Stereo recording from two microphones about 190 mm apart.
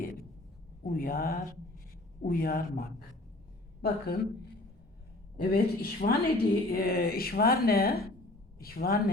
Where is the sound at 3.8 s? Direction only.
55° left (ahead or behind).